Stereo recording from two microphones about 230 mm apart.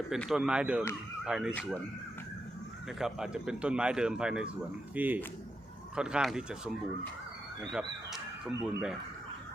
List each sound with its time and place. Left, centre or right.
0.1 s a man's voice: centre
3.0 s a man's voice: centre